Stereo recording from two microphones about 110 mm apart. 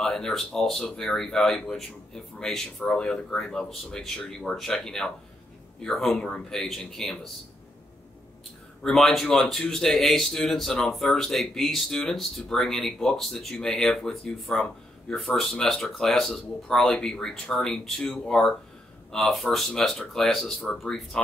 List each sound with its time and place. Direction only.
0.0 s speech: 5° left (ahead or behind)
8.8 s speech: 5° left (ahead or behind)